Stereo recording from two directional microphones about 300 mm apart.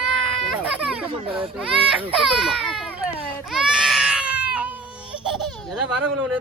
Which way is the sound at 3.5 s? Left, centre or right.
Centre.